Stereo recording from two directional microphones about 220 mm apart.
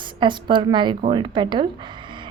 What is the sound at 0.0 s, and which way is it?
A woman's voice, 20° right (ahead or behind).